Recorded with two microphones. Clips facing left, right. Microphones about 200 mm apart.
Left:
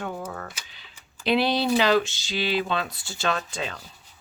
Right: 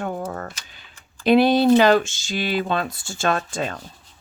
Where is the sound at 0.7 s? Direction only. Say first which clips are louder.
Right 2 dB; 50° right (ahead or behind).